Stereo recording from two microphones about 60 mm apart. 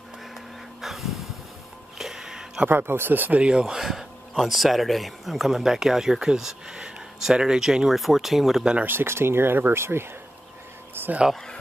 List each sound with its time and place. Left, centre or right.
0.7 s a sound: centre
2.7 s speech: right; by 8.6 s centre
8.8 s speech: right